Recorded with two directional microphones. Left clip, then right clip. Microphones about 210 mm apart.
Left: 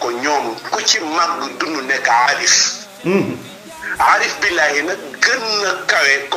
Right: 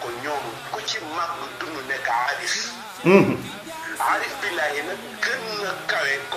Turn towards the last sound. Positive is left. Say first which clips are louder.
# left 10 dB
turn(degrees=40)  # may be behind; listen again after turning